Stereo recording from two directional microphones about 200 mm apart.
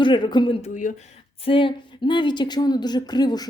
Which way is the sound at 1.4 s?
25° left (ahead or behind).